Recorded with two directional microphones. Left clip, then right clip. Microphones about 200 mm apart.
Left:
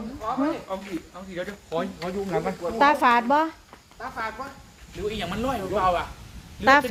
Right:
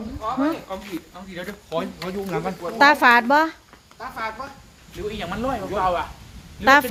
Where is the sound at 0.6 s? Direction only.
55° right (ahead or behind).